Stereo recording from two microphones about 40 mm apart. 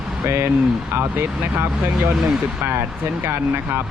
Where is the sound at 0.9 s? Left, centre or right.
Right.